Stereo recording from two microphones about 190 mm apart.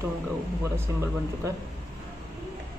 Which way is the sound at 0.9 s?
15° right (ahead or behind).